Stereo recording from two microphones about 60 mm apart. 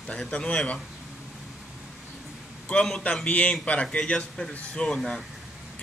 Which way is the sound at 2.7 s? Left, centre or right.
Centre.